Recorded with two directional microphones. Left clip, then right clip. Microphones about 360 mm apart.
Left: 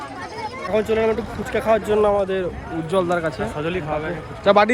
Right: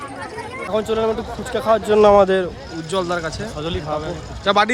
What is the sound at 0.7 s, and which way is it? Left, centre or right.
Speech, centre.